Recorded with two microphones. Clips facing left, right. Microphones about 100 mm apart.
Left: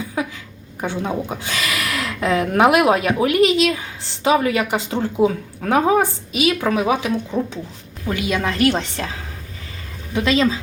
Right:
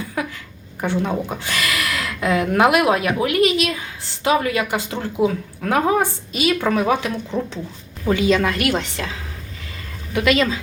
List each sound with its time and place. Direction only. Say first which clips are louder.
0.8 s speech: right 2 dB; 15° left (ahead or behind)
8.4 s a woman's voice: left 2 dB; 30° left (ahead or behind)
10.2 s speech: even; 25° left (ahead or behind)